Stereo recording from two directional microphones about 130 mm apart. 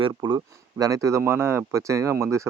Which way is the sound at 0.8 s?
25° right (ahead or behind).